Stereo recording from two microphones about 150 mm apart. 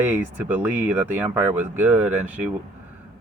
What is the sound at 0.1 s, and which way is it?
Speech, 15° right (ahead or behind).